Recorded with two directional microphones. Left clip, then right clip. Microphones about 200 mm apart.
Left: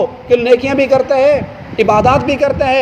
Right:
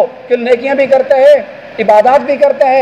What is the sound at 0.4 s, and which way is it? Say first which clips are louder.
Speech: right 3 dB; 45° left (ahead or behind).